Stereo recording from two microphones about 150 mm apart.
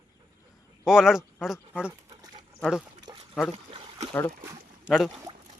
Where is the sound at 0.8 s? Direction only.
5° right (ahead or behind).